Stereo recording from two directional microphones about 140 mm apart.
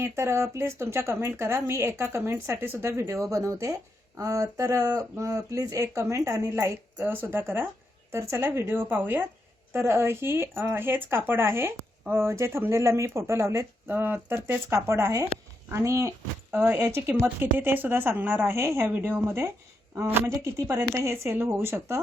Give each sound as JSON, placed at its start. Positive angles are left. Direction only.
{"t": 0.0, "sound": "a woman's voice", "side_deg": -20}